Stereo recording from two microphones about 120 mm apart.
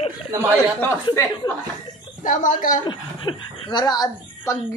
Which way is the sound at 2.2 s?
90° left.